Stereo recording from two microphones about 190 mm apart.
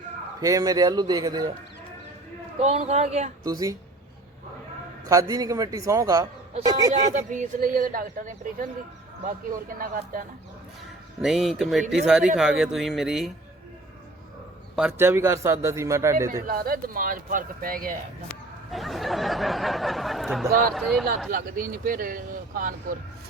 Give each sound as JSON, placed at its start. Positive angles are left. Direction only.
{"t": 0.3, "sound": "a man's voice", "side_deg": -20}
{"t": 2.6, "sound": "speech", "side_deg": -35}
{"t": 3.4, "sound": "a man's voice", "side_deg": -20}
{"t": 5.0, "sound": "a man's voice", "side_deg": -20}
{"t": 7.1, "sound": "speech", "side_deg": -40}
{"t": 11.2, "sound": "speech", "side_deg": 0}
{"t": 14.8, "sound": "a man's voice", "side_deg": -10}
{"t": 16.5, "sound": "speech", "side_deg": -50}
{"t": 18.7, "sound": "speech", "side_deg": 0}
{"t": 20.5, "sound": "speech", "side_deg": -50}
{"t": 20.7, "sound": "speech", "side_deg": 0}
{"t": 21.2, "sound": "speech", "side_deg": -45}